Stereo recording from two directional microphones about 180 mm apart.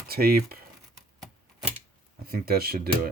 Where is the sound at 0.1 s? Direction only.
55° right (ahead or behind).